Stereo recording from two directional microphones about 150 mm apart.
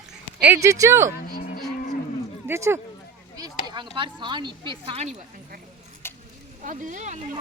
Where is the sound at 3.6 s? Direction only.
30° right (ahead or behind).